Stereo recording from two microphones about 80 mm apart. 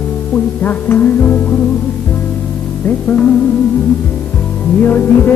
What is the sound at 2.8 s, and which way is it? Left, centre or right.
Music, centre.